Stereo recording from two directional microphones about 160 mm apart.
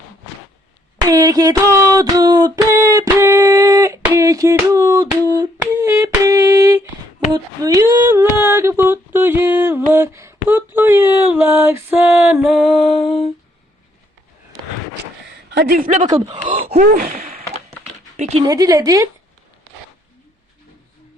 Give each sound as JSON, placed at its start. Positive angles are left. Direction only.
{"t": 0.9, "sound": "speech", "side_deg": -20}
{"t": 1.9, "sound": "a sound", "side_deg": -20}
{"t": 13.0, "sound": "humming", "side_deg": 35}
{"t": 15.5, "sound": "a sound", "side_deg": -80}
{"t": 16.1, "sound": "speech", "side_deg": -45}
{"t": 16.8, "sound": "gasp", "side_deg": -65}
{"t": 18.2, "sound": "dog", "side_deg": -40}
{"t": 18.4, "sound": "speech", "side_deg": -25}